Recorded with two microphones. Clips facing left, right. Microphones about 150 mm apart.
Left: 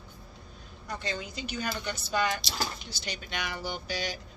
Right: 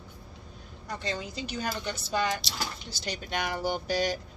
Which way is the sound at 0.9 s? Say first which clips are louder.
Right 2 dB; 30° right (ahead or behind).